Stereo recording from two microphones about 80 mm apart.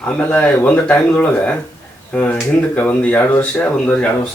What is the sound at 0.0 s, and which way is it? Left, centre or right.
Speech, centre.